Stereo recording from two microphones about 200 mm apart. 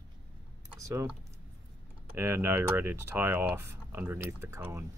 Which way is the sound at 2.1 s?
10° right (ahead or behind).